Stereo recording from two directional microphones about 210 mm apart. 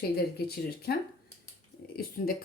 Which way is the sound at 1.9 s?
45° left (ahead or behind).